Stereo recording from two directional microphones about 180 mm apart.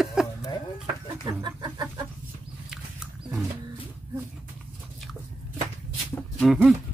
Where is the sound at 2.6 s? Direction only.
Centre (ahead or behind).